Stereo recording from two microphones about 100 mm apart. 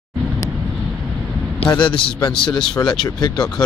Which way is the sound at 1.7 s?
55° left (ahead or behind).